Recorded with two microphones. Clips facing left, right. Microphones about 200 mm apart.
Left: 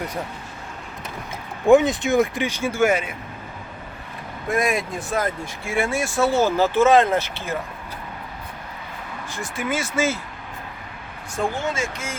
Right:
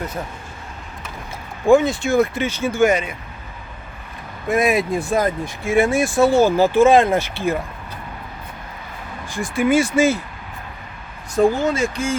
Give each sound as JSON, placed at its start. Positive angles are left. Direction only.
{"t": 1.7, "sound": "speech", "side_deg": 20}
{"t": 4.4, "sound": "speech", "side_deg": -5}
{"t": 9.3, "sound": "speech", "side_deg": -15}
{"t": 11.3, "sound": "speech", "side_deg": -35}